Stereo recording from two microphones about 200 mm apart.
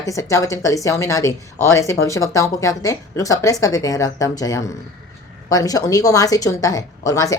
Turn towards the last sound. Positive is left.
turn(degrees=15)  # may be behind; listen again after turning